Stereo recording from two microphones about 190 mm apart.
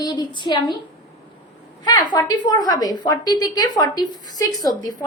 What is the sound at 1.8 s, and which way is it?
A woman's voice, 20° left (ahead or behind).